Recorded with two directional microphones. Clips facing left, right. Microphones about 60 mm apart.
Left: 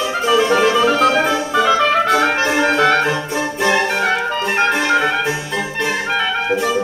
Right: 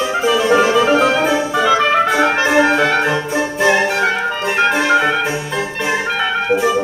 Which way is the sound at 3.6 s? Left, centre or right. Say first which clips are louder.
Right 2 dB; centre.